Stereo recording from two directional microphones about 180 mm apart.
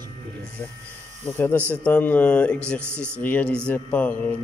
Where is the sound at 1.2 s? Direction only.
10° left (ahead or behind).